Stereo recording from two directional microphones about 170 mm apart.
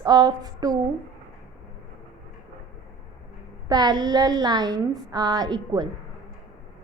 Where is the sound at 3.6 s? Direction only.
25° right (ahead or behind).